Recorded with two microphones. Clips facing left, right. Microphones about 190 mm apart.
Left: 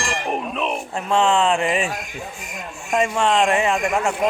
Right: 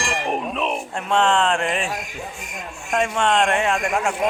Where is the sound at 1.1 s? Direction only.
5° left (ahead or behind).